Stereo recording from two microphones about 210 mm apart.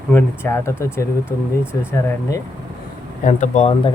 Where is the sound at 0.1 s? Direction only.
10° left (ahead or behind).